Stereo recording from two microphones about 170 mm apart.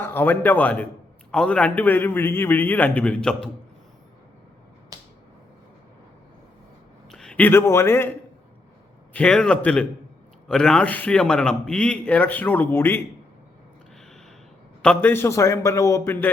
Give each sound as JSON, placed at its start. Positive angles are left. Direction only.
{"t": 0.0, "sound": "a man's voice", "side_deg": 10}
{"t": 4.9, "sound": "finger snapping", "side_deg": -20}
{"t": 7.1, "sound": "speech", "side_deg": 5}
{"t": 9.1, "sound": "a man's voice", "side_deg": 5}
{"t": 14.8, "sound": "a man's voice", "side_deg": 10}